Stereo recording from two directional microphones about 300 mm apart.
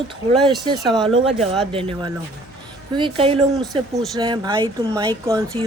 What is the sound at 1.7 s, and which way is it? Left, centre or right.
Speech, centre.